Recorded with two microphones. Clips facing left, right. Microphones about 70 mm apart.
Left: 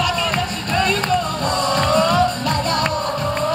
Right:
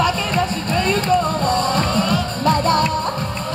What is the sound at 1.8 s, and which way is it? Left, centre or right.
Music, left.